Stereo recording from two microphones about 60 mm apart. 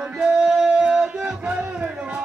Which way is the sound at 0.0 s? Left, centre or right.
Centre.